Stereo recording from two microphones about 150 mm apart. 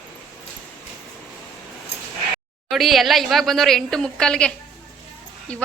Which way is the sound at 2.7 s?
Centre (ahead or behind).